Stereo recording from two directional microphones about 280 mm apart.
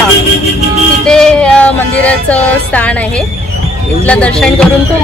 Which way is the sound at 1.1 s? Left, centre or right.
Centre.